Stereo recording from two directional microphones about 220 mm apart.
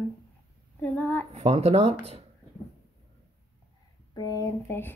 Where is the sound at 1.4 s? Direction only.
30° right (ahead or behind).